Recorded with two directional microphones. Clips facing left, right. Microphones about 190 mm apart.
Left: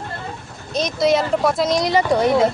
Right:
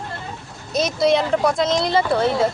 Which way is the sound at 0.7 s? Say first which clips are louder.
Even; 5° right (ahead or behind).